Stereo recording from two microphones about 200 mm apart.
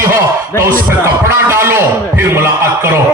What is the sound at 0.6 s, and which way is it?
A man's voice, 15° right (ahead or behind).